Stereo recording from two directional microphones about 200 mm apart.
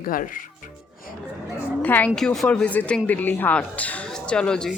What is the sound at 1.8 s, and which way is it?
Speech, 10° left (ahead or behind).